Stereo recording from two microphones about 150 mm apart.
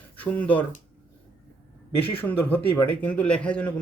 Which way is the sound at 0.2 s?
10° left (ahead or behind).